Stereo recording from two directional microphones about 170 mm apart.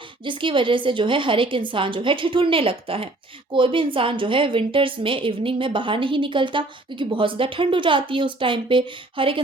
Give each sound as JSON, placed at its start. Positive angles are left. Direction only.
{"t": 0.3, "sound": "a woman's voice", "side_deg": -30}